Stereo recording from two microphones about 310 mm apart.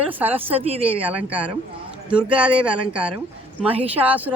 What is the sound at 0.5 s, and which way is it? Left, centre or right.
Speech, centre.